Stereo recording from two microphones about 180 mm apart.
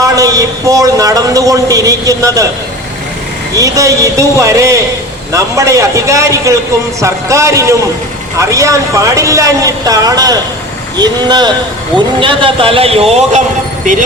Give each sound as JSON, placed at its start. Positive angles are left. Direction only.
{"t": 0.0, "sound": "a man's voice", "side_deg": -20}
{"t": 3.5, "sound": "a man's voice", "side_deg": -20}